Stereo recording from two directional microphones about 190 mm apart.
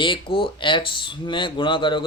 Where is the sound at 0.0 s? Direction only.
25° left (ahead or behind).